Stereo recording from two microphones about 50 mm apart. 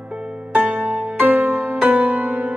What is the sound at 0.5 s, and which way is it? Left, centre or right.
Music, right.